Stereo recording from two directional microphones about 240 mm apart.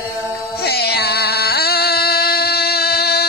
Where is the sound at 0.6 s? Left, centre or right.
Left.